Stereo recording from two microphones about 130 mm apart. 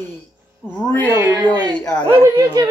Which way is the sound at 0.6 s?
20° left (ahead or behind).